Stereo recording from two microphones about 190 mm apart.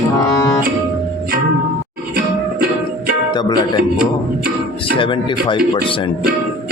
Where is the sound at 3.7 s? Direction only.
50° right (ahead or behind).